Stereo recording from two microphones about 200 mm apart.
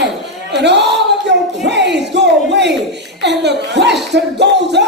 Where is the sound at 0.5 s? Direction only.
60° right (ahead or behind).